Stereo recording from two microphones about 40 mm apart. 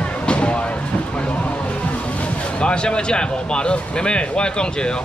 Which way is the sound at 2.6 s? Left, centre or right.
Left.